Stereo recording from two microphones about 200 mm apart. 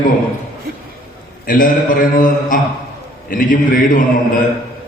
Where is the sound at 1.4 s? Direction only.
45° left (ahead or behind).